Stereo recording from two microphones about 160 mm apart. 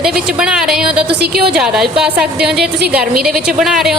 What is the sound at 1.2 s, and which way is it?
Speech, 75° right (ahead or behind).